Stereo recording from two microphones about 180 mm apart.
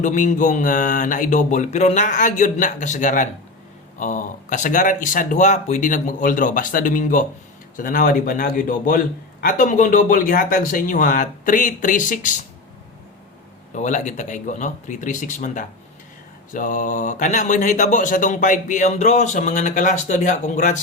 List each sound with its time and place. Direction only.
0.0 s a man's voice: 45° left (ahead or behind)
13.7 s a man's voice: 45° left (ahead or behind)